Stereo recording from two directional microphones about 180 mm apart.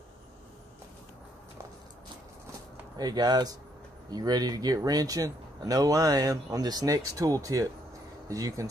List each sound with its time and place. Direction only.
3.0 s speech: 20° right (ahead or behind)